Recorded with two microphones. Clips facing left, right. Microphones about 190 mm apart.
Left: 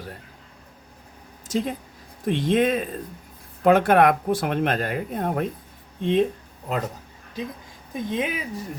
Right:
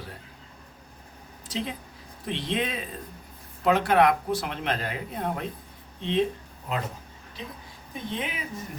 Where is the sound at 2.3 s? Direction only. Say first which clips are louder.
Left 9 dB; 50° left (ahead or behind).